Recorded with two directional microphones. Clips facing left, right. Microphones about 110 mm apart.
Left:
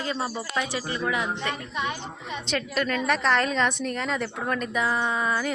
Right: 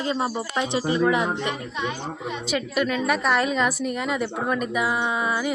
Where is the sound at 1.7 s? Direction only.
Centre (ahead or behind).